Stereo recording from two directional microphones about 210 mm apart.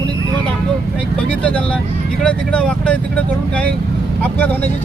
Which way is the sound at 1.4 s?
5° left (ahead or behind).